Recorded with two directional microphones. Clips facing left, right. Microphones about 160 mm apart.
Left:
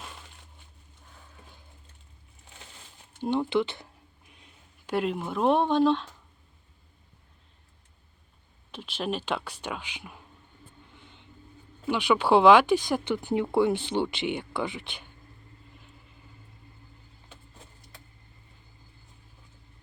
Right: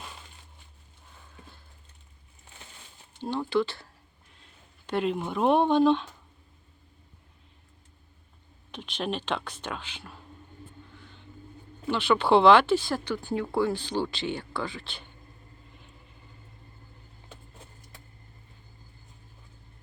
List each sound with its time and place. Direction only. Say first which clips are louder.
3.2 s speech: left 1 dB; 20° left (ahead or behind)
4.9 s speech: even; 5° left (ahead or behind)
8.7 s speech: even; 5° left (ahead or behind)
10.9 s vehicle: right 3 dB; 20° left (ahead or behind)
11.9 s speech: even; 10° left (ahead or behind)